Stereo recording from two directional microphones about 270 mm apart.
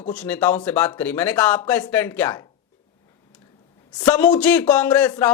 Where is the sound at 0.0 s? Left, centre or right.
Centre.